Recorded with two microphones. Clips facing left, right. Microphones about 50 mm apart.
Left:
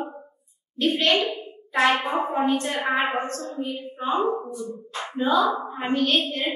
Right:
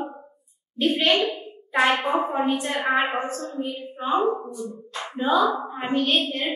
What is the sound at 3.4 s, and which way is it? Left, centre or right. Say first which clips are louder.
Hands: right 1 dB; centre.